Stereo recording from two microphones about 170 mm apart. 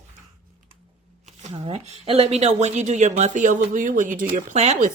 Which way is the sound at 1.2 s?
40° right (ahead or behind).